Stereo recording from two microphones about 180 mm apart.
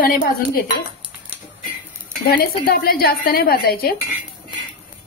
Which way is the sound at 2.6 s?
55° left (ahead or behind).